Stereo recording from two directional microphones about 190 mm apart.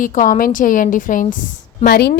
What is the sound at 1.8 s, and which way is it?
Speech, 60° left (ahead or behind).